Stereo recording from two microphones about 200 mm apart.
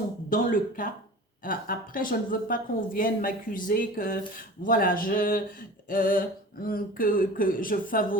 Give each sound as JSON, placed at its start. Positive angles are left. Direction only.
{"t": 0.3, "sound": "speech", "side_deg": 40}